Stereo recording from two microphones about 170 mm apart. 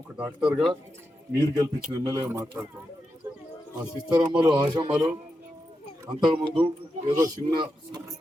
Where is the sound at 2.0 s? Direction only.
20° right (ahead or behind).